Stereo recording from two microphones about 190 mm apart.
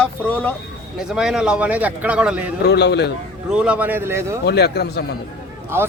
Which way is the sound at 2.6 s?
60° left (ahead or behind).